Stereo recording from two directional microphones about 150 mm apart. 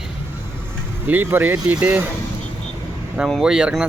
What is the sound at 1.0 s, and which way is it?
Speech, 10° right (ahead or behind).